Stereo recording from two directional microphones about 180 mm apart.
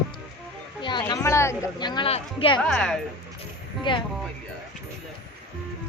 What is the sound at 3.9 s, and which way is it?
Speech, 25° left (ahead or behind).